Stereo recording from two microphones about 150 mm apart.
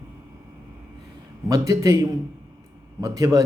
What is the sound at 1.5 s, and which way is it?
A man's voice, 25° right (ahead or behind).